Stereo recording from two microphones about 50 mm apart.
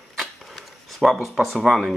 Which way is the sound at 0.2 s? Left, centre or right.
Centre.